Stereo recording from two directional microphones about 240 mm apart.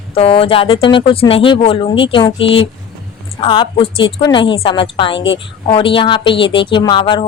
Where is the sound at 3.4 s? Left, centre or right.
Left.